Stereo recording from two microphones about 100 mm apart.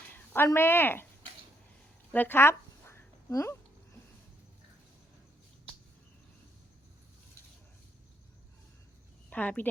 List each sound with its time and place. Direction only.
0.1 s speech: 25° left (ahead or behind)
2.1 s a sound: 20° left (ahead or behind)
9.3 s speech: 15° left (ahead or behind)